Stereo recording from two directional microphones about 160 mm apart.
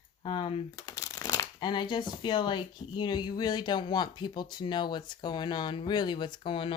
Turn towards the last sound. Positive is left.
turn(degrees=30)  # may be behind; listen again after turning